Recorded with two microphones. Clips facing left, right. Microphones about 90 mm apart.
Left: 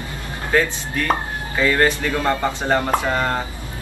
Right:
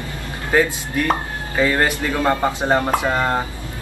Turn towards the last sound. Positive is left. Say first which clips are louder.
# right 1 dB
turn(degrees=-15)  # may be behind; listen again after turning